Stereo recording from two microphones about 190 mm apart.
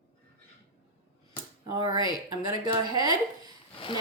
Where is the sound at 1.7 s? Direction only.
15° right (ahead or behind).